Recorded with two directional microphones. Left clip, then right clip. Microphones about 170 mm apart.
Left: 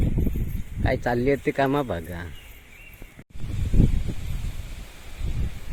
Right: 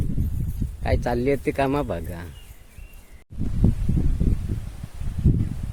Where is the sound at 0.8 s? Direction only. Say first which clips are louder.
Even; 15° right (ahead or behind).